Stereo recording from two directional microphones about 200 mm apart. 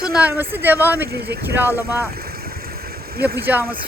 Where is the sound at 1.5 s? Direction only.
10° right (ahead or behind).